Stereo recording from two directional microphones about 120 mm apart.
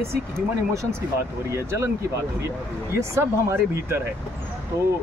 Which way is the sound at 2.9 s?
20° right (ahead or behind).